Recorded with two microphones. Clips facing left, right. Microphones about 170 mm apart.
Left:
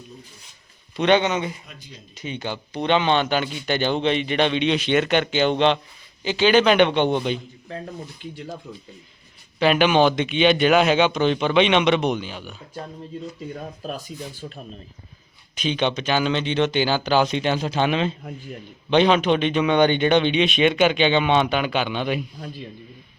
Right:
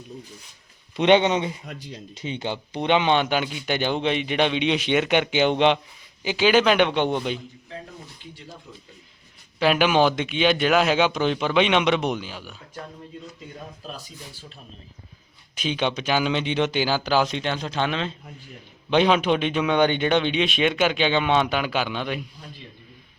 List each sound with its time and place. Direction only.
0.9 s speech: 20° right (ahead or behind)
1.6 s speech: 65° right (ahead or behind)
2.1 s a man's voice: 25° right (ahead or behind); by 7.4 s 5° right (ahead or behind)
9.6 s a man's voice: 5° right (ahead or behind)
14.4 s speech: 60° left (ahead or behind)
15.5 s a man's voice: 5° right (ahead or behind); by 18.1 s 10° left (ahead or behind)
18.9 s a man's voice: 5° right (ahead or behind)